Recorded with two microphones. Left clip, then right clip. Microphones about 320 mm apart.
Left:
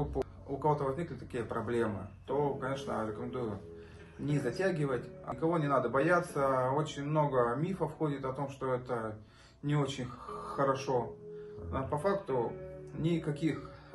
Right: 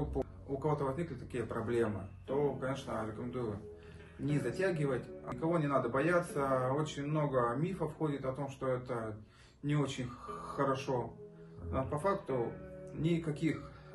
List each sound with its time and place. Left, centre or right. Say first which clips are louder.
0.2 s a man's voice: left 4 dB; centre
4.3 s a man's voice: left 2 dB; centre